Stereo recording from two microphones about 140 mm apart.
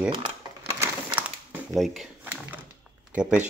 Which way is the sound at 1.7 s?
Centre (ahead or behind).